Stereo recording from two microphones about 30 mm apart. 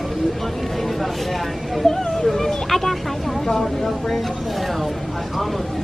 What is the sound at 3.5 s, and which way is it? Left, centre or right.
Speech, centre.